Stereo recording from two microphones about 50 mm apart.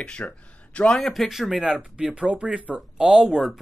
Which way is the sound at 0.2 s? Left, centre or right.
Left.